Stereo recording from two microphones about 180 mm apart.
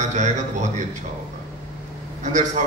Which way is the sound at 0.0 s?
40° right (ahead or behind).